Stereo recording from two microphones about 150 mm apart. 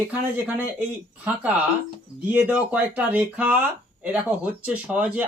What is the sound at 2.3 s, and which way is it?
Speech, 10° right (ahead or behind).